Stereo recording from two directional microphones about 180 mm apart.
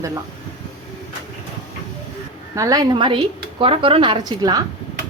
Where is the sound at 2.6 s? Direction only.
20° right (ahead or behind).